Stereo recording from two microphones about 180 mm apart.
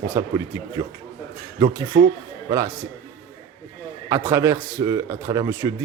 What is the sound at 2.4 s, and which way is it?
Speech, 20° right (ahead or behind).